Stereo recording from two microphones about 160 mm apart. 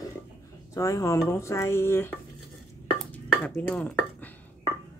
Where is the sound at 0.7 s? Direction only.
20° left (ahead or behind).